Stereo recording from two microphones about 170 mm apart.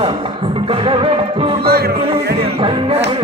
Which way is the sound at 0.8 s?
30° right (ahead or behind).